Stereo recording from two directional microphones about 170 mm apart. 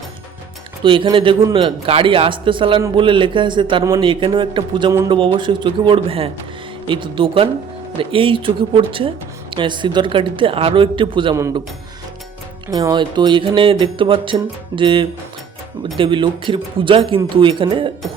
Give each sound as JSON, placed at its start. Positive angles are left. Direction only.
{"t": 0.8, "sound": "speech", "side_deg": -30}
{"t": 11.3, "sound": "speech", "side_deg": -20}
{"t": 12.7, "sound": "speech", "side_deg": -25}